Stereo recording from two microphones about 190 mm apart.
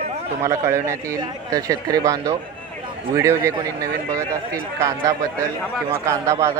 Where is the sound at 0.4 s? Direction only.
15° right (ahead or behind).